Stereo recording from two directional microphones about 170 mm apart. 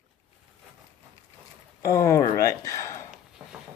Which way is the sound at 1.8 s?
20° left (ahead or behind).